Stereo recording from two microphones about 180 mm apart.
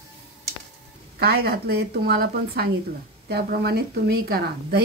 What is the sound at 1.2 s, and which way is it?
A woman's voice, 60° right (ahead or behind).